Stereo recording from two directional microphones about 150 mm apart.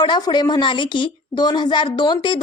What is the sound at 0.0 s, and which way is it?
Speech, 30° left (ahead or behind).